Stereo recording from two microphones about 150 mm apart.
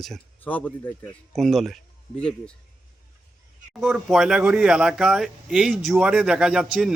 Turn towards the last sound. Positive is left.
turn(degrees=-5)  # may be behind; listen again after turning